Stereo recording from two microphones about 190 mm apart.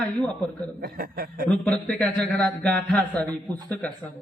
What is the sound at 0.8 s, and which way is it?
Speech, 50° right (ahead or behind).